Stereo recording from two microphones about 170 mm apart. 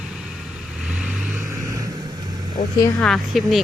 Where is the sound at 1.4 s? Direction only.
20° right (ahead or behind).